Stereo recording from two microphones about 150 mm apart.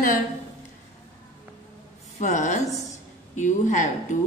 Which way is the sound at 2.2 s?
55° left (ahead or behind).